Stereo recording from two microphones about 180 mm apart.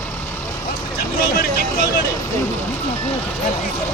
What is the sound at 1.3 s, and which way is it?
Vehicle, 55° left (ahead or behind).